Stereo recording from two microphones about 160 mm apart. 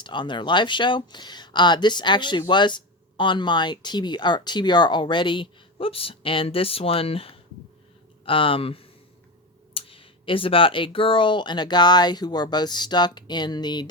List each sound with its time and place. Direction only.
0.0 s speech: 30° left (ahead or behind)